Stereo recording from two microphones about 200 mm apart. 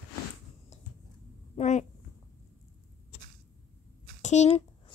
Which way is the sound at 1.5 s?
35° left (ahead or behind).